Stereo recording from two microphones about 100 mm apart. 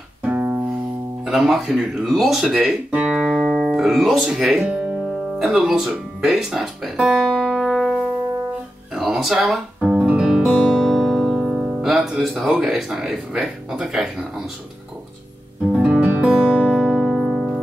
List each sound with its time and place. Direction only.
0.2 s music: 15° right (ahead or behind)
1.2 s speech: 5° right (ahead or behind)
7.2 s music: centre (ahead or behind)
8.9 s guitar: 5° right (ahead or behind)
15.7 s music: 10° right (ahead or behind)